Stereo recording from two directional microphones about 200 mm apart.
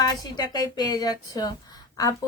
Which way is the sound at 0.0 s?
20° left (ahead or behind).